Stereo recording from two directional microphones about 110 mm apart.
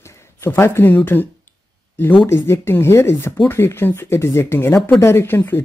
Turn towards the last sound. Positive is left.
turn(degrees=20)  # may be behind; listen again after turning